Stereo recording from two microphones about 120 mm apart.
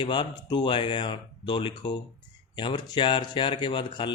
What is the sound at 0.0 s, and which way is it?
Speech, 40° left (ahead or behind).